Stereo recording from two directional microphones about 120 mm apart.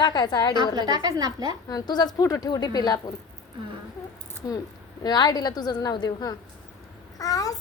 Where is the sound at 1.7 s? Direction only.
35° left (ahead or behind).